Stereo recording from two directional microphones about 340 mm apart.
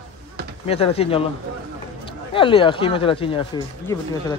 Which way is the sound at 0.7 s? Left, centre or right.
Centre.